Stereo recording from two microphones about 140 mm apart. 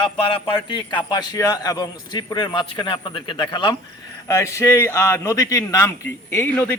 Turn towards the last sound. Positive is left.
turn(degrees=15)  # may be behind; listen again after turning